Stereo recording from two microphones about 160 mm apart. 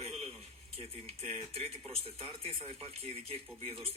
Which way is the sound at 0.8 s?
40° right (ahead or behind).